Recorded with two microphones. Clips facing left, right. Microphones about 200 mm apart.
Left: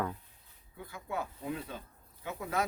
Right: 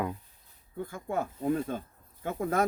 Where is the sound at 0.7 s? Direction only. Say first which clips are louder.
Right 6 dB; 50° right (ahead or behind).